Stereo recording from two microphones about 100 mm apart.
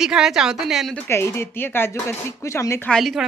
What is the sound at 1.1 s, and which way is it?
Speech, 25° left (ahead or behind).